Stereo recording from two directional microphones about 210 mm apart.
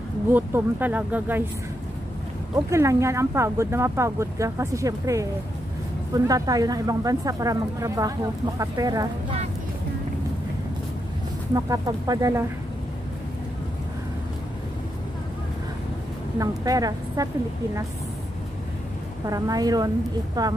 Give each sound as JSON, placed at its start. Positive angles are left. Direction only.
{"t": 0.3, "sound": "speech", "side_deg": -10}
{"t": 2.5, "sound": "speech", "side_deg": -15}
{"t": 11.5, "sound": "speech", "side_deg": -15}
{"t": 16.3, "sound": "speech", "side_deg": -15}
{"t": 19.2, "sound": "a woman's voice", "side_deg": -15}